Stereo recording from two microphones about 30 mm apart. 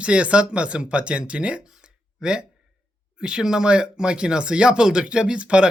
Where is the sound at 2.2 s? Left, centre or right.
Right.